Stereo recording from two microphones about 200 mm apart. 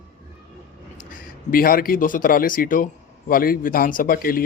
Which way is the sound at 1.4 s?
45° left (ahead or behind).